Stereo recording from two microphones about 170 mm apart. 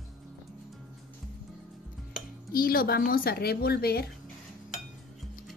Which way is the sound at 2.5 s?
60° left (ahead or behind).